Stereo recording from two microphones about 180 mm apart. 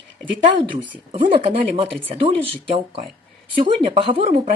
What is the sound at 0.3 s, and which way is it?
Speech, 25° right (ahead or behind).